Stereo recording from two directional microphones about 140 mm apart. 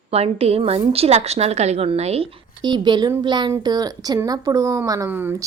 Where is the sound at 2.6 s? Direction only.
30° right (ahead or behind).